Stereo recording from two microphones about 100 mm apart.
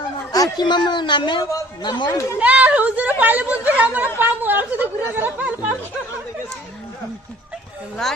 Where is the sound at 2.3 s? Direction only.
15° right (ahead or behind).